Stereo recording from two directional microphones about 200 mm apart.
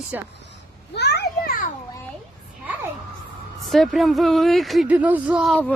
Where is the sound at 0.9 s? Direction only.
55° left (ahead or behind).